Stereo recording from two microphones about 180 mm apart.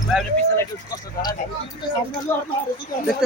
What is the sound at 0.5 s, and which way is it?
Speech, 20° left (ahead or behind).